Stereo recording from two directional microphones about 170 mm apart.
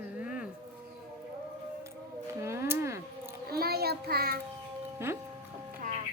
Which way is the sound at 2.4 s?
15° right (ahead or behind).